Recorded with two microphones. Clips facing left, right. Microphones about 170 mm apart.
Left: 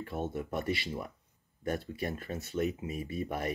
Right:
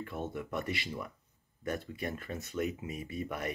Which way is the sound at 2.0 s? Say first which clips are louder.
Left 2 dB; 35° left (ahead or behind).